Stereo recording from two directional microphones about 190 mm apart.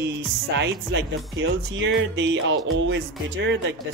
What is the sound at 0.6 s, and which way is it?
Speech, 70° right (ahead or behind).